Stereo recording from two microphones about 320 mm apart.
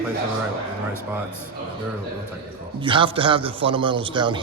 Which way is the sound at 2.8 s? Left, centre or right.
Centre.